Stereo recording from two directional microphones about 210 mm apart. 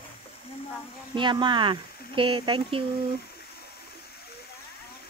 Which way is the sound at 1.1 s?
20° right (ahead or behind).